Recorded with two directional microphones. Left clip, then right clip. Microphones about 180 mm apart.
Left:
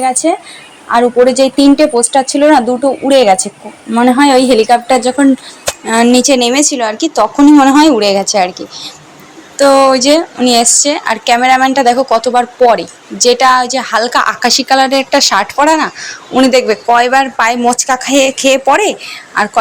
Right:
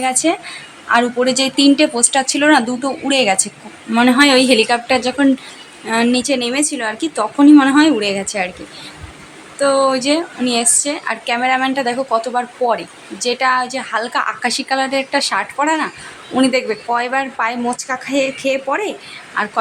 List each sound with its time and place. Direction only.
0.0 s a woman's voice: 20° left (ahead or behind)